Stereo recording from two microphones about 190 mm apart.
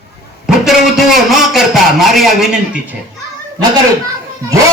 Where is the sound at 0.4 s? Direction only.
Centre (ahead or behind).